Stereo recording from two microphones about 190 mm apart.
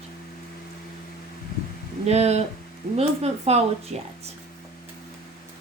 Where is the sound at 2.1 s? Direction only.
35° right (ahead or behind).